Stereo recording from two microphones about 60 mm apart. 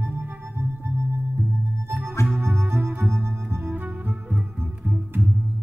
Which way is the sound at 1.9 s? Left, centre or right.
Right.